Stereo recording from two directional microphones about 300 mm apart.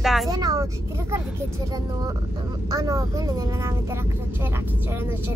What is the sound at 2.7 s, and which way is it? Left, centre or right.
Speech, centre.